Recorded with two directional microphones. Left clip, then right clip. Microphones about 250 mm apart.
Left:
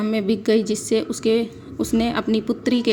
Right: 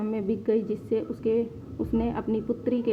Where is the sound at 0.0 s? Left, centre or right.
Left.